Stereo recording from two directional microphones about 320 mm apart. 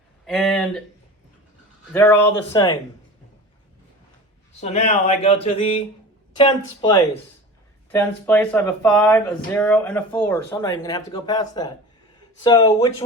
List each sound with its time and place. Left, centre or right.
0.3 s speech: centre
1.9 s speech: centre
4.6 s speech: left
7.9 s speech: centre